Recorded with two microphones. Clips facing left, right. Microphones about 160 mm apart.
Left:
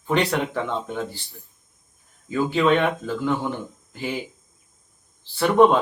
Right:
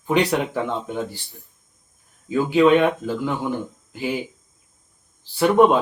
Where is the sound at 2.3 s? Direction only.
10° right (ahead or behind).